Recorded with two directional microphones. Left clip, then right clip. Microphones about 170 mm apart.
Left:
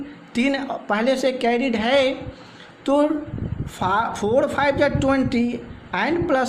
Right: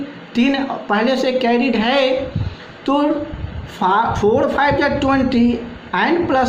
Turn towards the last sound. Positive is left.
turn(degrees=50)  # may be behind; listen again after turning